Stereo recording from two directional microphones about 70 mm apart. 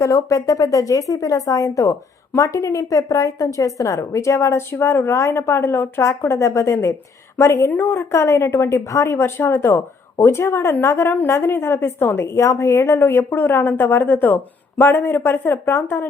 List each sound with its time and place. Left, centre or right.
0.0 s speech: left
7.7 s speech: left